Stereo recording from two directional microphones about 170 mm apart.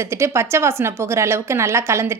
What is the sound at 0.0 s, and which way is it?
A woman's voice, 15° right (ahead or behind).